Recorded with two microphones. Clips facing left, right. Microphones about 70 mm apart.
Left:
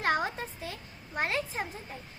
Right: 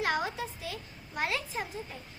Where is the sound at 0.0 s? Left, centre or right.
Left.